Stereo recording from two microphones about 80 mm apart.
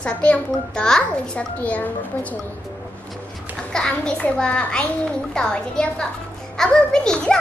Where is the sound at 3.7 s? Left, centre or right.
Centre.